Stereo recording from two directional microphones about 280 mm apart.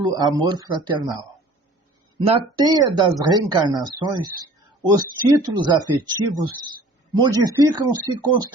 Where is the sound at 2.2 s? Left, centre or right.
Centre.